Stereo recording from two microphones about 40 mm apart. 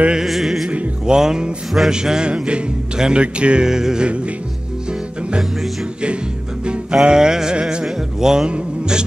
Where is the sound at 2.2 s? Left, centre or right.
Right.